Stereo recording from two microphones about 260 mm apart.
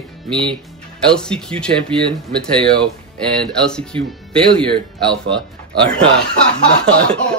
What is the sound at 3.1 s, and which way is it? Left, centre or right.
Speech, centre.